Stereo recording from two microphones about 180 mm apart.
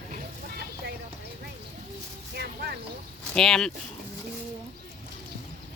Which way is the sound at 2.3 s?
60° right (ahead or behind).